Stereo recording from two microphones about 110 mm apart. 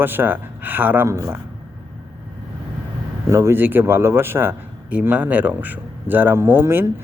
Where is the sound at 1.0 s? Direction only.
30° right (ahead or behind).